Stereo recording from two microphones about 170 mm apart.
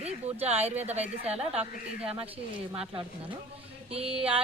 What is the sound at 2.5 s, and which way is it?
A woman's voice, 30° right (ahead or behind).